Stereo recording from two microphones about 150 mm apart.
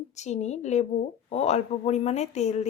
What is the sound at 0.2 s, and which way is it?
A woman's voice, 50° left (ahead or behind).